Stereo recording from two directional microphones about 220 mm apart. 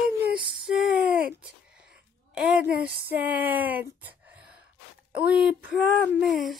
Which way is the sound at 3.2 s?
5° right (ahead or behind).